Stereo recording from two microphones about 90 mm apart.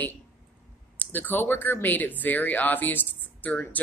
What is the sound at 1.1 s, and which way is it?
Speech, 20° left (ahead or behind).